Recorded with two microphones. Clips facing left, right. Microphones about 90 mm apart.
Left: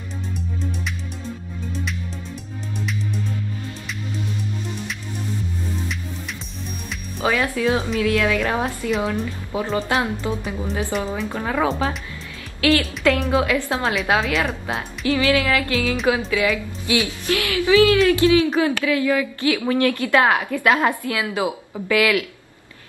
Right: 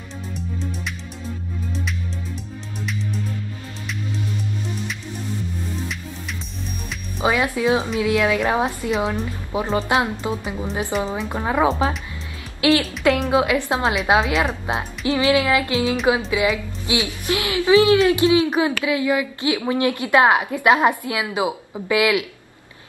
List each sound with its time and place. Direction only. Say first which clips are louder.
7.2 s speech: right 1 dB; 20° right (ahead or behind)
10.9 s speech: right 2 dB; 5° right (ahead or behind)
11.2 s speech: right 4 dB; 20° right (ahead or behind)
12.5 s music: right 1 dB; 25° right (ahead or behind)
13.3 s speech: right 1 dB; 20° right (ahead or behind)